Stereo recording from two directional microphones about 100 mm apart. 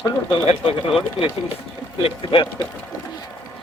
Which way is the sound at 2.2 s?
60° left (ahead or behind).